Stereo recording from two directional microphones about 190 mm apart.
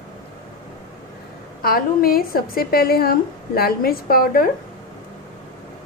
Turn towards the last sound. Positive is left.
turn(degrees=50)  # may be behind; listen again after turning